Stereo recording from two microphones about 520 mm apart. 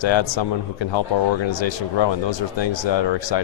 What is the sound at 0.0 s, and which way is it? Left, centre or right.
A man's voice, left.